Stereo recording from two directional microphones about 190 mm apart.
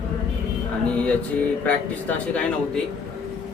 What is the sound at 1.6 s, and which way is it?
Speech, 10° left (ahead or behind).